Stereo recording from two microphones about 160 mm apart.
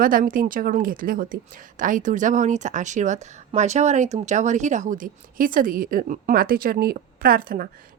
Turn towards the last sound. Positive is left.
turn(degrees=-65)  # may be behind; listen again after turning